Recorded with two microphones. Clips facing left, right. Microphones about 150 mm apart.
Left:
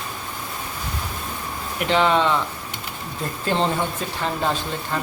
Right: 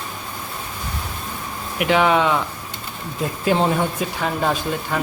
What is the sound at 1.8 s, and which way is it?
Speech, 10° right (ahead or behind).